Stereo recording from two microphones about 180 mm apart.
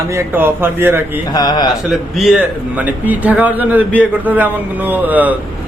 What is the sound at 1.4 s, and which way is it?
Speech, 25° left (ahead or behind).